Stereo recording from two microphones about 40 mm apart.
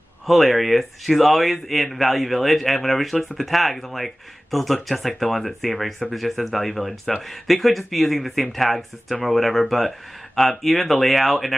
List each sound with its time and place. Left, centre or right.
0.3 s speech: centre